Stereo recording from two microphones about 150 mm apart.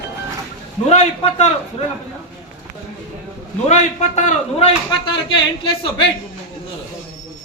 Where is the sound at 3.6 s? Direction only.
50° left (ahead or behind); by 6.0 s 35° left (ahead or behind).